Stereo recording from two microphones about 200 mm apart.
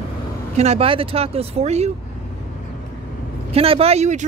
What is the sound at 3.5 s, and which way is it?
Speech, 30° right (ahead or behind).